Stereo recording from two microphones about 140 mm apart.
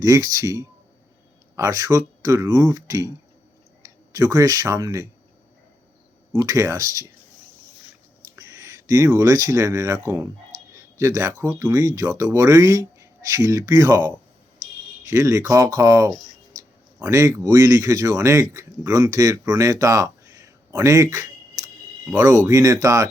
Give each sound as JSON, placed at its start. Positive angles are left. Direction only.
{"t": 0.0, "sound": "speech", "side_deg": -25}
{"t": 6.3, "sound": "speech", "side_deg": -25}
{"t": 8.2, "sound": "speech", "side_deg": -25}
{"t": 15.1, "sound": "speech", "side_deg": -20}